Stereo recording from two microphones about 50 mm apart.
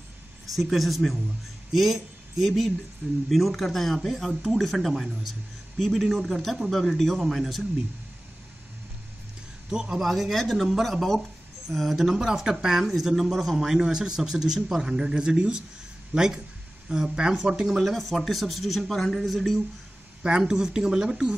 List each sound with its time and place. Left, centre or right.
0.6 s speech: centre
9.7 s a man's voice: centre
17.8 s speech: centre
20.2 s speech: centre